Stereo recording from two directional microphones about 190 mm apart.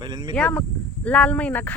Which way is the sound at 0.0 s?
20° right (ahead or behind).